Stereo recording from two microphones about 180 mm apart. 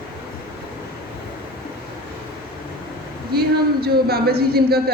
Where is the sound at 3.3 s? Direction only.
60° right (ahead or behind).